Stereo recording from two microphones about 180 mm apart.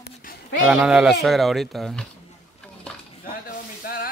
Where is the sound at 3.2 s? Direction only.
50° left (ahead or behind).